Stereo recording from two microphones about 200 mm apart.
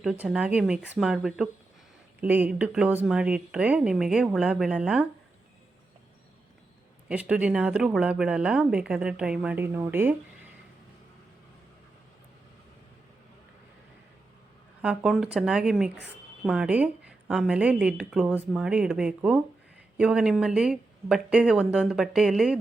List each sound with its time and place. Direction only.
0.0 s speech: 5° right (ahead or behind)
7.1 s speech: 5° right (ahead or behind)
14.8 s speech: 5° right (ahead or behind)